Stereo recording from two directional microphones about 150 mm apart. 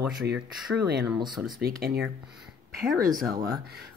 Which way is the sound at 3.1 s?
25° right (ahead or behind).